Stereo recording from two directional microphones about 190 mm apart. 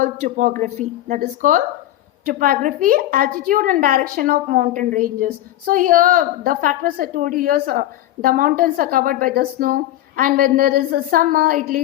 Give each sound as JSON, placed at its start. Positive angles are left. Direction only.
{"t": 0.0, "sound": "a woman's voice", "side_deg": -40}